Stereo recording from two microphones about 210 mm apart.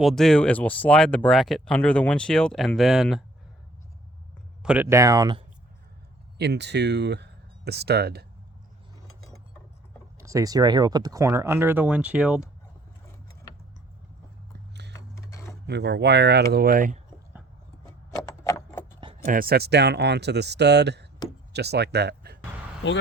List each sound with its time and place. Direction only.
0.0 s speech: centre (ahead or behind)
4.6 s speech: 5° right (ahead or behind)
6.4 s speech: 55° right (ahead or behind)
10.2 s speech: 15° right (ahead or behind)
14.9 s sewing machine: 15° left (ahead or behind)
15.6 s speech: 55° right (ahead or behind)
18.3 s a sound: 10° left (ahead or behind)
19.3 s speech: 45° right (ahead or behind)
22.8 s speech: 60° left (ahead or behind)